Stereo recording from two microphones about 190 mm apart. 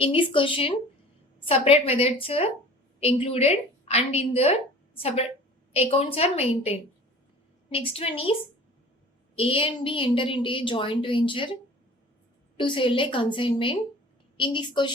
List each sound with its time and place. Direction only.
0.0 s a woman's voice: 25° left (ahead or behind)
12.5 s a woman's voice: 25° left (ahead or behind)